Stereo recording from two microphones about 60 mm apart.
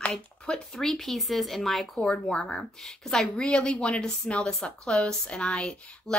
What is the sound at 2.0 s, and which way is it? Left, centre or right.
A woman's voice, centre.